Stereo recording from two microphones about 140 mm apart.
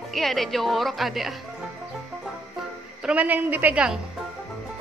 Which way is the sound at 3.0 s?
10° right (ahead or behind).